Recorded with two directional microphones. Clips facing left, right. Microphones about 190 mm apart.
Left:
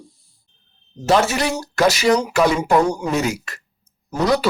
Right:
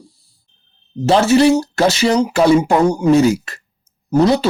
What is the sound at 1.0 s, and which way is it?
Speech, 30° right (ahead or behind).